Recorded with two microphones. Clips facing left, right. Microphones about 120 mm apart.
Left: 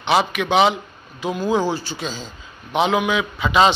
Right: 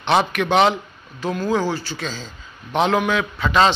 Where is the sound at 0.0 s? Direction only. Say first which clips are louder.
Even; 5° left (ahead or behind).